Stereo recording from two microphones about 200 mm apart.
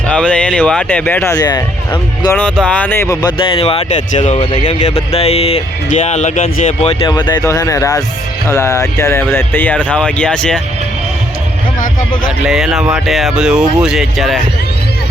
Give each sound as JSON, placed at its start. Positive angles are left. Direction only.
{"t": 0.1, "sound": "speech", "side_deg": 5}
{"t": 2.3, "sound": "speech", "side_deg": 5}
{"t": 7.0, "sound": "speech", "side_deg": 20}
{"t": 12.5, "sound": "speech", "side_deg": 0}